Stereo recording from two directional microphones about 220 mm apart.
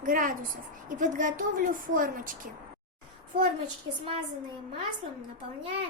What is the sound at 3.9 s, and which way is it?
Speech, 60° right (ahead or behind).